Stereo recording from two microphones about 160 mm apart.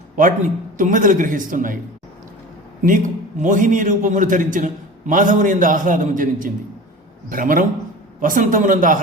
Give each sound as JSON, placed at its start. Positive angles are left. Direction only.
{"t": 0.8, "sound": "a man's voice", "side_deg": -55}
{"t": 2.8, "sound": "a man's voice", "side_deg": -55}